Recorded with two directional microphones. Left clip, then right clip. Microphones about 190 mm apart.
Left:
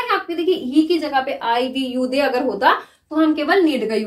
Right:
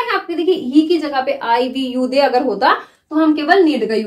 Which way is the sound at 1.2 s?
20° right (ahead or behind).